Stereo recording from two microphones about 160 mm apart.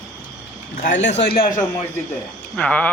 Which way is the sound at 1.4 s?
55° left (ahead or behind).